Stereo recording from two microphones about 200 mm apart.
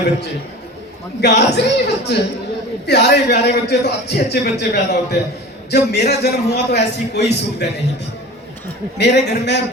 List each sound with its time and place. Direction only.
1.2 s a man's voice: 55° left (ahead or behind)
9.0 s a man's voice: 60° left (ahead or behind)